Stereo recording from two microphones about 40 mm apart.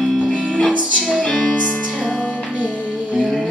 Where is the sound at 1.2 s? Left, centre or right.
Left.